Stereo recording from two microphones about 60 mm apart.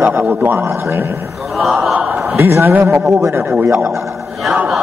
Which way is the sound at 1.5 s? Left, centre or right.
Centre.